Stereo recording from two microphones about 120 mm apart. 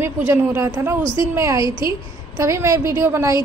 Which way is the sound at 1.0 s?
45° left (ahead or behind).